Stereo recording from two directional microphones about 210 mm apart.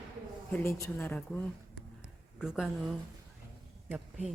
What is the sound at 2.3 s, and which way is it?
Speech, 5° right (ahead or behind).